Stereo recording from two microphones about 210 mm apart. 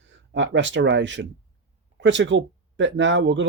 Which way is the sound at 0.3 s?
60° right (ahead or behind).